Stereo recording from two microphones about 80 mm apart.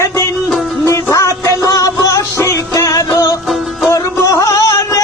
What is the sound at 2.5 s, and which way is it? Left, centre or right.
Music, left.